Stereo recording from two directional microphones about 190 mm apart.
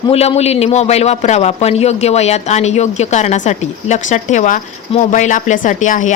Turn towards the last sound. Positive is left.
turn(degrees=40)  # may be behind; listen again after turning